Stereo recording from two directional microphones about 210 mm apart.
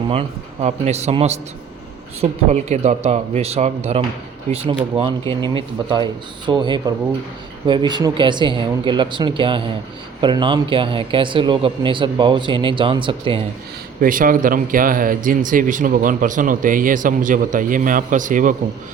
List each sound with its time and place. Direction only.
0.1 s speech: 30° right (ahead or behind)
14.0 s speech: 40° right (ahead or behind)